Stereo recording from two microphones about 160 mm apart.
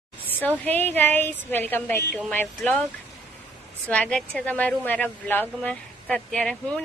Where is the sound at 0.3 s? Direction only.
10° left (ahead or behind).